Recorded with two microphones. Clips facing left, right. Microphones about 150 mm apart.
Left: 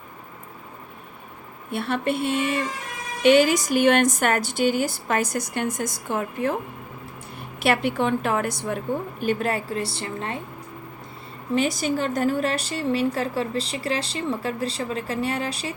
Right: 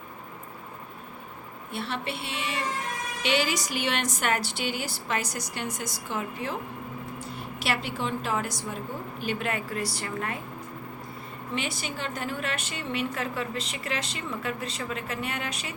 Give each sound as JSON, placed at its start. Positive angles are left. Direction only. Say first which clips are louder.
{"t": 1.7, "sound": "a woman's voice", "louder": "left 8 dB", "side_deg": 55}
{"t": 9.2, "sound": "a woman's voice", "louder": "left 5 dB", "side_deg": 40}
{"t": 11.5, "sound": "a woman's voice", "louder": "left 10 dB", "side_deg": 40}